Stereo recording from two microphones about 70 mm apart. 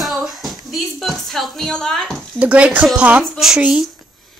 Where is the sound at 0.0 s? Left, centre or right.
Centre.